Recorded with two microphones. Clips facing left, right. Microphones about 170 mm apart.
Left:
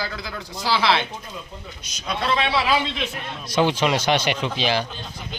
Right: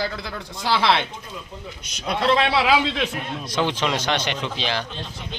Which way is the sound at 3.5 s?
10° left (ahead or behind).